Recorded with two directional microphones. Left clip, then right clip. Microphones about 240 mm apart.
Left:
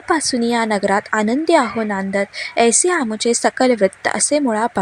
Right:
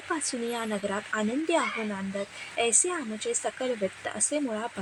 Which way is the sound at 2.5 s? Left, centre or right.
Centre.